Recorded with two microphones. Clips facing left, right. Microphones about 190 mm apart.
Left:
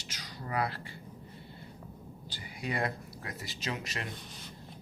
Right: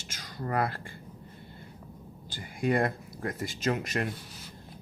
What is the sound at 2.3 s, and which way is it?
Speech, 50° right (ahead or behind).